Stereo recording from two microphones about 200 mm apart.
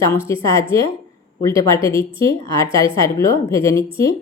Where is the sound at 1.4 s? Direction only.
15° left (ahead or behind).